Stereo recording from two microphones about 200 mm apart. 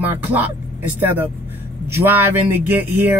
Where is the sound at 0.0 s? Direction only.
10° right (ahead or behind).